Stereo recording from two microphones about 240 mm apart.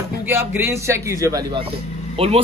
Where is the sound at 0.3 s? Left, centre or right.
Centre.